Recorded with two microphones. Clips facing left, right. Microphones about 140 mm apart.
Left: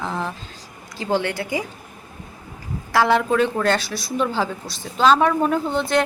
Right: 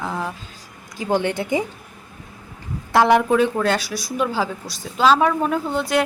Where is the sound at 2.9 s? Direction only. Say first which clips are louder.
Right 2 dB; 15° right (ahead or behind).